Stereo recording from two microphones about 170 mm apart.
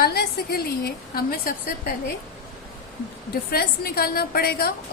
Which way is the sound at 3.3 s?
65° left (ahead or behind).